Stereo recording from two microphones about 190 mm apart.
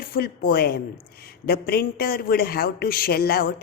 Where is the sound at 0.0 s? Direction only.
50° left (ahead or behind).